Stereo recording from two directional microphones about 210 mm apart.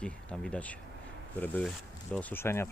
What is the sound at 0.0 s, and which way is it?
Speech, 5° left (ahead or behind).